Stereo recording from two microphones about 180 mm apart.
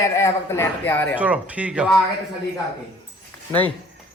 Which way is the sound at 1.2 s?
10° right (ahead or behind).